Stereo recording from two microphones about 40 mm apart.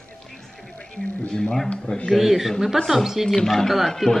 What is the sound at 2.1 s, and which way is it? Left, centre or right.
Speech, centre.